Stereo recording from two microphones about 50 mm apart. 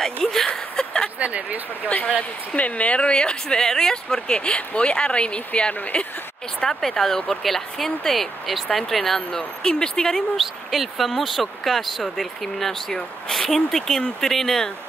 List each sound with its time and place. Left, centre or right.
0.0 s speech: centre
0.5 s a sound: centre
1.2 s speech: right
2.5 s speech: left
6.6 s speech: centre
10.1 s speech: centre